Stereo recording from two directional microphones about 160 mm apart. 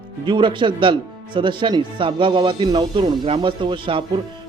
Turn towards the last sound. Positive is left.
turn(degrees=-30)  # may be behind; listen again after turning